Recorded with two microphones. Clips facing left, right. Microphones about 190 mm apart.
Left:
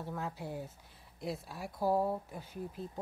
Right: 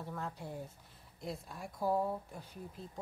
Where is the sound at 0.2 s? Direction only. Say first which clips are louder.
Left 3 dB; 5° left (ahead or behind).